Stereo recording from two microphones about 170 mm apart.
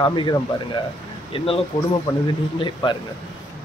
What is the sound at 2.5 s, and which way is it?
Speech, 30° left (ahead or behind).